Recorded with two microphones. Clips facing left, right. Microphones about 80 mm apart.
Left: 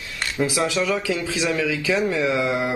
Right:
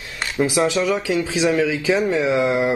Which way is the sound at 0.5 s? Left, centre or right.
Right.